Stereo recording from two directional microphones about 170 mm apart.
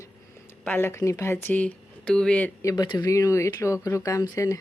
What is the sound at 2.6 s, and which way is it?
Speech, 20° left (ahead or behind).